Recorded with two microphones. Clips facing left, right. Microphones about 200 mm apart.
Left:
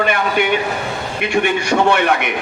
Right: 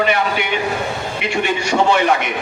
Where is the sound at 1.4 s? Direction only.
60° left (ahead or behind).